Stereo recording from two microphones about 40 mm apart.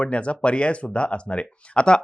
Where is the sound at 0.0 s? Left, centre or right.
Left.